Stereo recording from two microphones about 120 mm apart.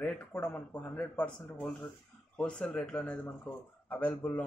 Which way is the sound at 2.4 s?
10° left (ahead or behind).